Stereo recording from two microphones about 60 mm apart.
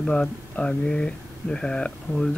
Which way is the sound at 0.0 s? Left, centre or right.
Left.